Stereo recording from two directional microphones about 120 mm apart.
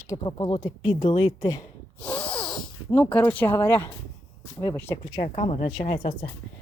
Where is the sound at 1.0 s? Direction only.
55° left (ahead or behind).